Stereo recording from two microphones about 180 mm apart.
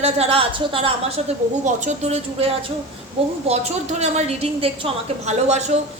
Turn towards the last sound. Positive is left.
turn(degrees=-40)  # may be behind; listen again after turning